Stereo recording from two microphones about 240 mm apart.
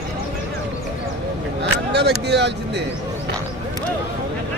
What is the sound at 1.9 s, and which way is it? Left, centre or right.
Speech, right.